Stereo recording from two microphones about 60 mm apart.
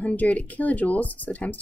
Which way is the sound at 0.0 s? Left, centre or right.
Left.